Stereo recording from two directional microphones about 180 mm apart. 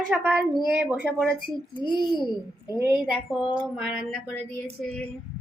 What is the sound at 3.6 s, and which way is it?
Speech, 5° right (ahead or behind).